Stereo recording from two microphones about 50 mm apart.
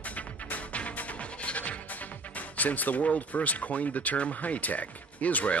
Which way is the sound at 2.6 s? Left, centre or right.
Left.